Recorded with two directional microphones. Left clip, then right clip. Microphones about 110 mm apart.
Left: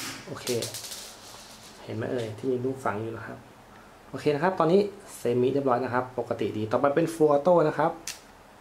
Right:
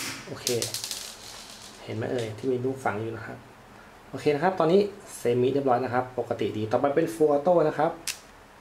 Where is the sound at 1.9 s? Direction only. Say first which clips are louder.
Right 1 dB; centre (ahead or behind).